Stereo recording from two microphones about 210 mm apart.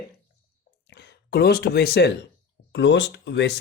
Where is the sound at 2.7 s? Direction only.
60° left (ahead or behind).